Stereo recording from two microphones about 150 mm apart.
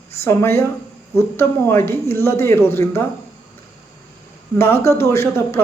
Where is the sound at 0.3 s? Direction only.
15° left (ahead or behind).